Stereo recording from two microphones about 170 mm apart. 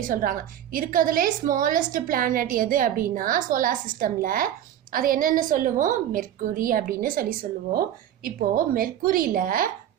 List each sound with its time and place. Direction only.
0.0 s a woman's voice: 55° right (ahead or behind)